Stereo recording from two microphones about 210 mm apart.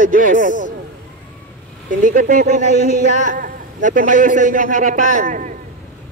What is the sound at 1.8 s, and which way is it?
A man's voice, 40° right (ahead or behind).